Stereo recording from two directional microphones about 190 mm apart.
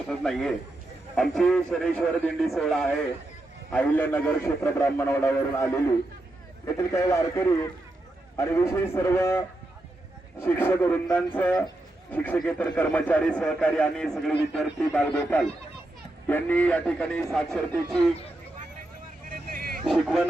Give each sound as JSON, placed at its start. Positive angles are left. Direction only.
{"t": 0.1, "sound": "a man's voice", "side_deg": 0}
{"t": 6.7, "sound": "a man's voice", "side_deg": 15}
{"t": 10.4, "sound": "a man's voice", "side_deg": 10}
{"t": 19.3, "sound": "vehicle", "side_deg": -50}
{"t": 19.9, "sound": "a man's voice", "side_deg": 0}